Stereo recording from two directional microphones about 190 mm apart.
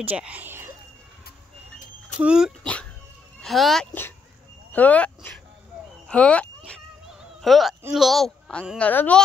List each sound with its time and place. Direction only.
0.0 s speech: 10° right (ahead or behind)
2.2 s a child's voice: 5° right (ahead or behind)
6.0 s music: 5° left (ahead or behind)
7.9 s a child's voice: centre (ahead or behind)